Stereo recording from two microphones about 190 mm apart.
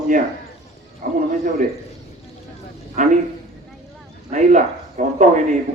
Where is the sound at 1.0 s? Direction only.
45° right (ahead or behind).